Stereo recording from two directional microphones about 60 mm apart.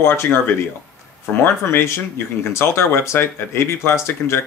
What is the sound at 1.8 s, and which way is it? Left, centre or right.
Speech, left.